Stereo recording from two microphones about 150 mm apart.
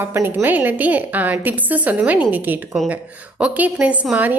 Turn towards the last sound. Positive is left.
turn(degrees=-10)  # may be behind; listen again after turning